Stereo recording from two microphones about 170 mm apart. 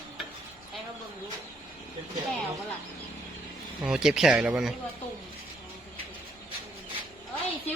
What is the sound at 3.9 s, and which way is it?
Speech, 5° right (ahead or behind).